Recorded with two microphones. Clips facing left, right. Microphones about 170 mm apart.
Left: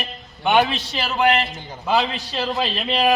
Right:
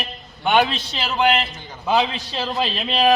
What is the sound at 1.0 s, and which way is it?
A man's voice, centre (ahead or behind).